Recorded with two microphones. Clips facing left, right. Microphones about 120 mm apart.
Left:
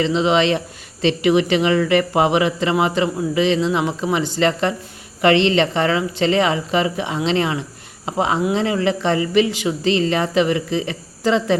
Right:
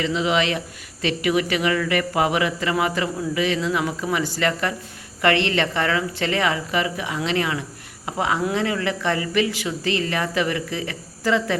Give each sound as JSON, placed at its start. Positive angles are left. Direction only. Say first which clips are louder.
{"t": 0.0, "sound": "speech", "louder": "left 5 dB", "side_deg": 30}